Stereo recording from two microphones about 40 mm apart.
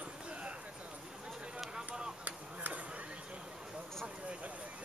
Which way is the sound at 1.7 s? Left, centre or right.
Centre.